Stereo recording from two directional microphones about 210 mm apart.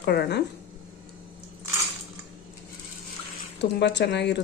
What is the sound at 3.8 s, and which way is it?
Speech, 55° left (ahead or behind).